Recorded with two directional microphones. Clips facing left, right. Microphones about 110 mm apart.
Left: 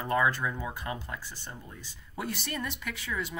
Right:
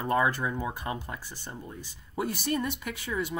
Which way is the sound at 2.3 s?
45° right (ahead or behind).